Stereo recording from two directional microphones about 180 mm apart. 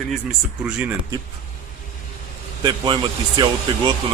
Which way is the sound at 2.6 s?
25° right (ahead or behind).